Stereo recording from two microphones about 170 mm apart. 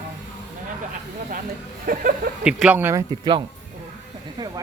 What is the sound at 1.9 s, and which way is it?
Speech, 55° right (ahead or behind).